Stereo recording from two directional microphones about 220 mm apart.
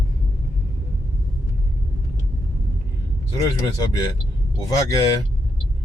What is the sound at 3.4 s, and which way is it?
Speech, 15° left (ahead or behind).